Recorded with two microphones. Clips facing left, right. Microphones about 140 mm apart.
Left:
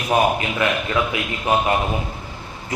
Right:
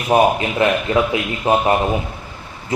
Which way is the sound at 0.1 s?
25° right (ahead or behind).